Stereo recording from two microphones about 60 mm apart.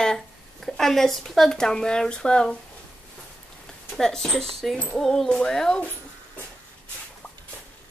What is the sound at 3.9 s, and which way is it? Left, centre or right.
Speech, centre.